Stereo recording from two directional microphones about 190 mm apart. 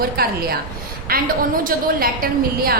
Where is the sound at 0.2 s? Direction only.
55° right (ahead or behind).